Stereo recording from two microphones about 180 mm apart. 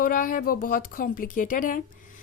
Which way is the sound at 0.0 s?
50° left (ahead or behind).